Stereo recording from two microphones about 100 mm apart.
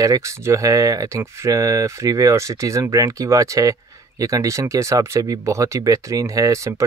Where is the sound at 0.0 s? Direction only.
35° right (ahead or behind).